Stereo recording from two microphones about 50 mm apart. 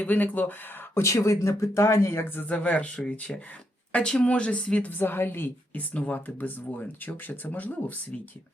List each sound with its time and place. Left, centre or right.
0.0 s speech: left
0.9 s speech: left
2.5 s speech: left
4.9 s a woman's voice: left
5.9 s speech: left
8.1 s speech: left